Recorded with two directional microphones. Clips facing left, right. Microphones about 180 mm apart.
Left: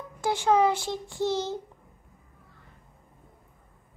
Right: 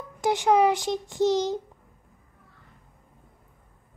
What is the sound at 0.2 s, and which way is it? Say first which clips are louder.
A child's voice: right 2 dB; 20° right (ahead or behind).